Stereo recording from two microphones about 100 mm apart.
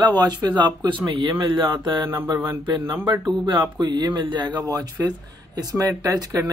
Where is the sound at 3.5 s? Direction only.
50° right (ahead or behind).